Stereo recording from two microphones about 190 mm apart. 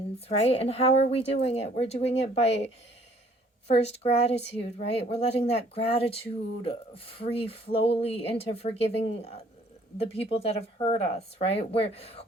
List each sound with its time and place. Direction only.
0.3 s speech: 30° left (ahead or behind)
3.7 s speech: 35° left (ahead or behind)